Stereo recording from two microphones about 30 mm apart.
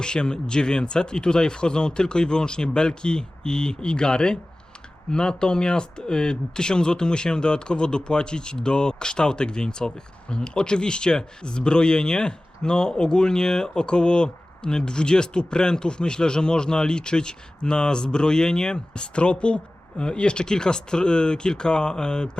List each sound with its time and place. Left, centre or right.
0.0 s speech: left